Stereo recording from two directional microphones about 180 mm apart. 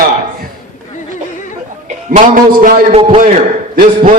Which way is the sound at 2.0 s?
50° right (ahead or behind).